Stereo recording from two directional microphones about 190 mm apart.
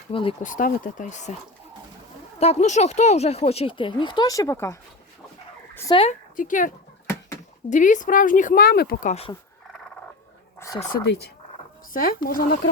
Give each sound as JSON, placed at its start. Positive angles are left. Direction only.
{"t": 0.1, "sound": "a woman's voice", "side_deg": 30}
{"t": 0.4, "sound": "speech", "side_deg": 45}
{"t": 2.4, "sound": "speech", "side_deg": 35}
{"t": 5.9, "sound": "a woman's voice", "side_deg": 30}
{"t": 6.3, "sound": "speech", "side_deg": 45}
{"t": 7.7, "sound": "speech", "side_deg": 45}
{"t": 11.9, "sound": "speech", "side_deg": 50}